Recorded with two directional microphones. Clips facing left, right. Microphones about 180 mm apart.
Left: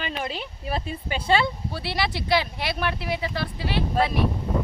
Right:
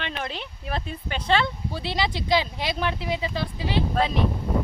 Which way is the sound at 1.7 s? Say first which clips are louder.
Right 3 dB; 15° right (ahead or behind).